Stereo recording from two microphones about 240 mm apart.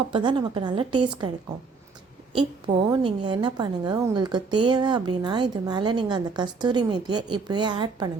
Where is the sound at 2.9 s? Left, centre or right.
Centre.